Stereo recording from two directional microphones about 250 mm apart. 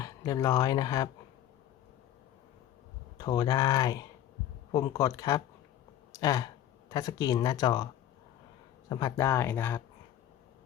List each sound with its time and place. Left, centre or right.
0.0 s speech: centre
3.2 s speech: centre
8.9 s speech: centre